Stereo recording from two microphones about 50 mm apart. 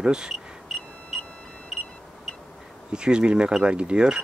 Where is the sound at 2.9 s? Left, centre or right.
Centre.